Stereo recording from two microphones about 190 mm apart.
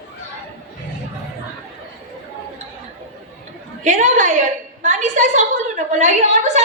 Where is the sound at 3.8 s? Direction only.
40° right (ahead or behind).